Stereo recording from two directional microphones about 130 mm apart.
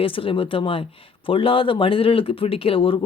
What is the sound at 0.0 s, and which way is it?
Speech, 45° left (ahead or behind).